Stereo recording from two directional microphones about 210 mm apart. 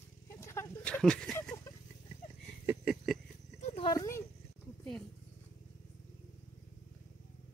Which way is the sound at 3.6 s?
25° left (ahead or behind).